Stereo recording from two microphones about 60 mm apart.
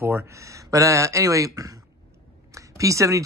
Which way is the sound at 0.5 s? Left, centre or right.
Right.